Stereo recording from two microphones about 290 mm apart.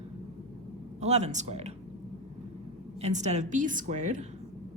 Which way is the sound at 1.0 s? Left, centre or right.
Right.